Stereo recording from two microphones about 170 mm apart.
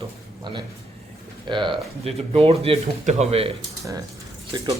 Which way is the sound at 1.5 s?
30° right (ahead or behind).